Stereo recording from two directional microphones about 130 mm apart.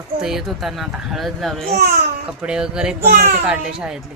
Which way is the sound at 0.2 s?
Centre (ahead or behind).